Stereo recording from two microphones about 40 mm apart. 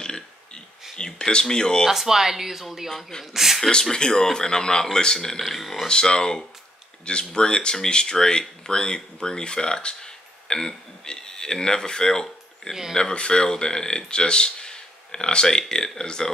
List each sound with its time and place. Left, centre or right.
0.9 s speech: centre
1.9 s speech: centre
3.9 s speech: centre
5.5 s speech: centre
5.9 s speech: centre